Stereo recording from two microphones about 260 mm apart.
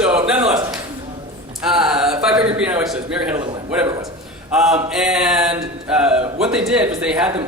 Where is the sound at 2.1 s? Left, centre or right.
Centre.